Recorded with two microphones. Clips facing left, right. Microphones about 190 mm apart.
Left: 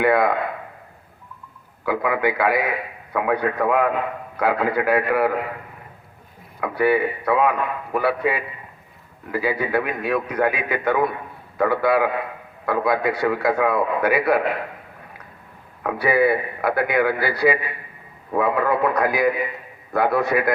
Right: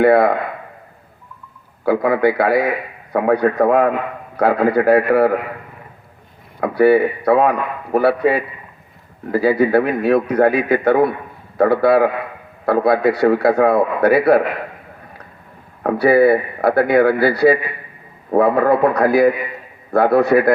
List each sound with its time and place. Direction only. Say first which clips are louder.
0.0 s a man's voice: right 6 dB; 40° right (ahead or behind)
1.8 s a man's voice: right 6 dB; 40° right (ahead or behind)
6.6 s a man's voice: right 7 dB; 40° right (ahead or behind)
15.8 s a man's voice: right 7 dB; 40° right (ahead or behind)